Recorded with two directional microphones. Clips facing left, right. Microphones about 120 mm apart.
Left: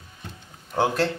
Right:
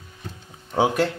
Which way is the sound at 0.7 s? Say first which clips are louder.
Right 2 dB; 15° right (ahead or behind).